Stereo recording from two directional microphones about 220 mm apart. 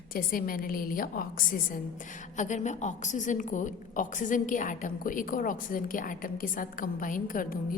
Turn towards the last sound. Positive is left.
turn(degrees=40)  # may be behind; listen again after turning